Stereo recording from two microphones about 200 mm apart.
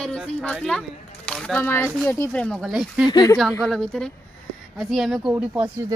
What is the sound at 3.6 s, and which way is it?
Speech, centre (ahead or behind).